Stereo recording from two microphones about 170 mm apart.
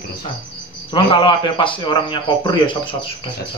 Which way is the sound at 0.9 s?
30° left (ahead or behind).